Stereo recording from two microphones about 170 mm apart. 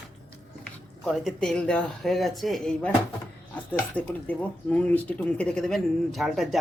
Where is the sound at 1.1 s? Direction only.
Centre (ahead or behind).